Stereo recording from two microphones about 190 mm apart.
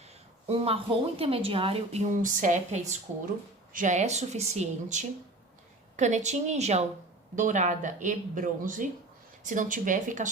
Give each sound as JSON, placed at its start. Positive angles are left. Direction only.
{"t": 0.4, "sound": "speech", "side_deg": -30}